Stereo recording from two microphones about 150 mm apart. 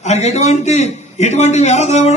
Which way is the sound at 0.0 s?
50° left (ahead or behind).